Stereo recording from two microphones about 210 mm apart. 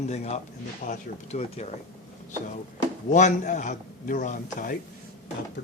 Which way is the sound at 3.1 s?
35° left (ahead or behind).